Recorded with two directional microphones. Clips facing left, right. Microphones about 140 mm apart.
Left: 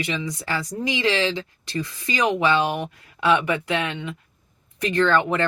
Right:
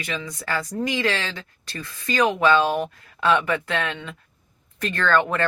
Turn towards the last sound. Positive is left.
turn(degrees=20)  # may be behind; listen again after turning